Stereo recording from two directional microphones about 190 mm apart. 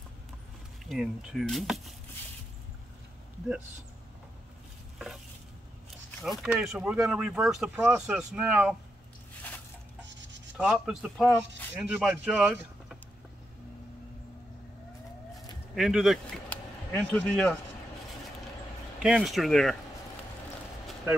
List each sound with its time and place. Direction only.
0.8 s speech: centre (ahead or behind)
6.4 s speech: centre (ahead or behind)
10.0 s a sound: 70° right (ahead or behind)
10.6 s speech: 5° right (ahead or behind)
15.7 s speech: centre (ahead or behind)
19.0 s speech: centre (ahead or behind)